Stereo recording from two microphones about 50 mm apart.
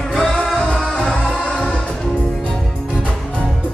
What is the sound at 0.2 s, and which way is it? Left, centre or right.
Music, centre.